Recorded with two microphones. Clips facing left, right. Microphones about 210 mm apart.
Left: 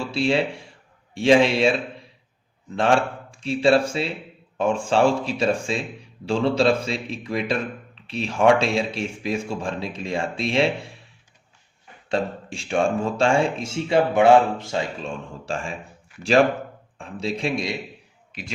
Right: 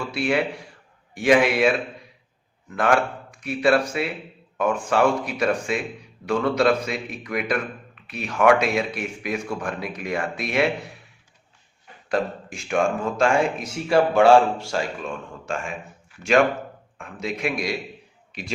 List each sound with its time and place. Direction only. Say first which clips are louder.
0.0 s speech: left 1 dB; 25° left (ahead or behind)
2.7 s speech: left 1 dB; 30° left (ahead or behind)
12.0 s speech: even; 30° left (ahead or behind)